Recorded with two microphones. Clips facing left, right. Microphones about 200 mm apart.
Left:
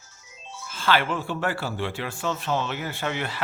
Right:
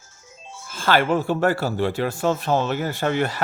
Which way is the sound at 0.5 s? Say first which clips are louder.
Right 4 dB; 45° right (ahead or behind).